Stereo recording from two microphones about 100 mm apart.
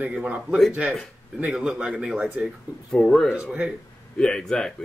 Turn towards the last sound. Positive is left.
turn(degrees=5)  # may be behind; listen again after turning